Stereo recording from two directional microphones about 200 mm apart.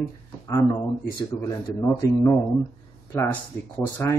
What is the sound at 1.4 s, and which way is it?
Speech, 15° left (ahead or behind).